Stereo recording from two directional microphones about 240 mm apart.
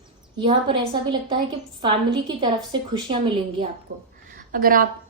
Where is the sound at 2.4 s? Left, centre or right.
Centre.